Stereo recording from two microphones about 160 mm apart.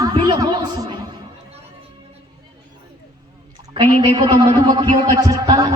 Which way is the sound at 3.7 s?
30° right (ahead or behind).